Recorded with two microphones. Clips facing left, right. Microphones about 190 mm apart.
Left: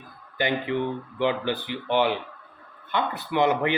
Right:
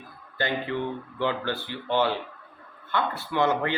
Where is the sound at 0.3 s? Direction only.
15° left (ahead or behind).